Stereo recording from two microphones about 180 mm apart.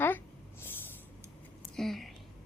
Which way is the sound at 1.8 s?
Centre (ahead or behind).